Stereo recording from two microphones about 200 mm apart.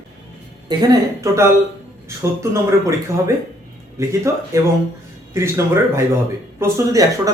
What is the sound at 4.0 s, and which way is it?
Speech, 15° right (ahead or behind).